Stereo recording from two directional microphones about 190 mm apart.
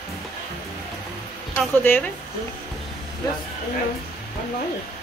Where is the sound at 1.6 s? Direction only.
10° left (ahead or behind).